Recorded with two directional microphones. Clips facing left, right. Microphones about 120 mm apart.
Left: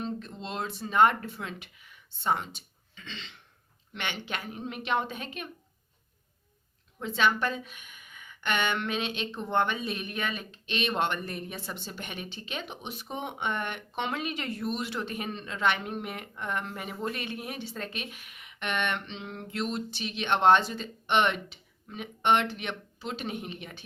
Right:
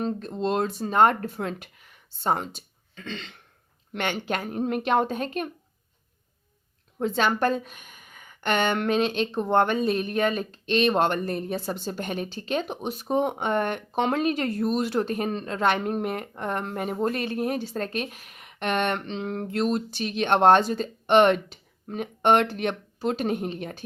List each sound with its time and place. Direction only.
0.0 s a woman's voice: 40° right (ahead or behind)
7.0 s a woman's voice: 45° right (ahead or behind)